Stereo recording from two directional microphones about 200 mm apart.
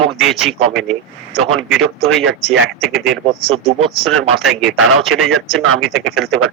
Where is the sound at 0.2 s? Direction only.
Centre (ahead or behind).